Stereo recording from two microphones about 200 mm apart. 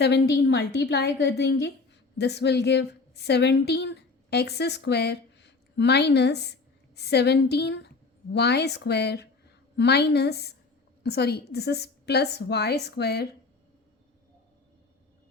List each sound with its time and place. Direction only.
0.0 s a woman's voice: 55° left (ahead or behind)